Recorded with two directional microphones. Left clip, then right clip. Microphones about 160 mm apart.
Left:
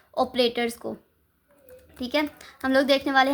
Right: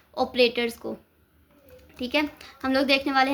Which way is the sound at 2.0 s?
40° left (ahead or behind).